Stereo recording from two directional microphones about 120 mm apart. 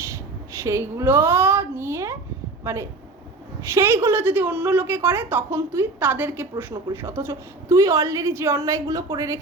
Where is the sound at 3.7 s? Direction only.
20° right (ahead or behind).